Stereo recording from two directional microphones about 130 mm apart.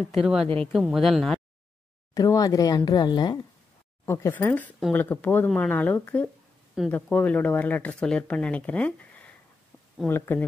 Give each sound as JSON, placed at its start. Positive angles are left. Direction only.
{"t": 0.1, "sound": "speech", "side_deg": -5}
{"t": 2.1, "sound": "speech", "side_deg": 25}
{"t": 4.0, "sound": "speech", "side_deg": 20}